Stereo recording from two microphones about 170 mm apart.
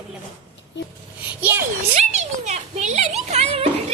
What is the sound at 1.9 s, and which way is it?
A child's voice, 40° right (ahead or behind).